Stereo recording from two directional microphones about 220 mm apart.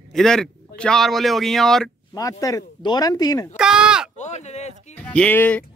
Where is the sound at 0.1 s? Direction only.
Centre (ahead or behind).